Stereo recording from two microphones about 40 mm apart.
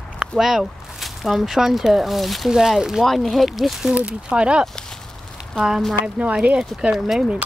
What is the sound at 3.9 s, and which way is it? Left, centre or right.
Speech, right.